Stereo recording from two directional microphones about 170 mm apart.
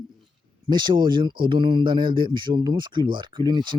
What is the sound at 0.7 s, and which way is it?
Speech, 25° right (ahead or behind).